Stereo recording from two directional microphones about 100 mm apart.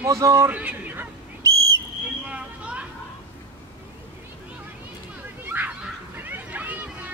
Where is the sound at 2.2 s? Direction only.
10° right (ahead or behind).